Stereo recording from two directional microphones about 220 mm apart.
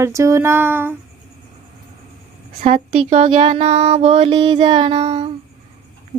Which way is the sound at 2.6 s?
25° right (ahead or behind).